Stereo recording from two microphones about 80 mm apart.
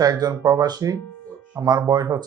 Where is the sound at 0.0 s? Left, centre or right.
Right.